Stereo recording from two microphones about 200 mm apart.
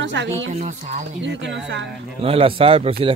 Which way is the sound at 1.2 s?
65° right (ahead or behind).